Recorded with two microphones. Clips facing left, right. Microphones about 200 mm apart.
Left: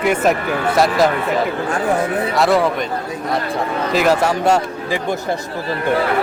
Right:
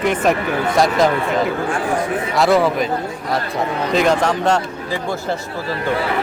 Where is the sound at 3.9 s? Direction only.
5° left (ahead or behind).